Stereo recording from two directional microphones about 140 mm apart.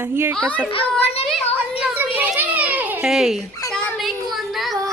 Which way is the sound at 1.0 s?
45° left (ahead or behind).